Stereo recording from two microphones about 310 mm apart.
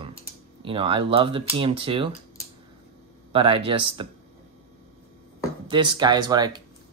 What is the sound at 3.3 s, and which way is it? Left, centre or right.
Speech, centre.